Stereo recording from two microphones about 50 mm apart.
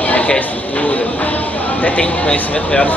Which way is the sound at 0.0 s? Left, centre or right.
Left.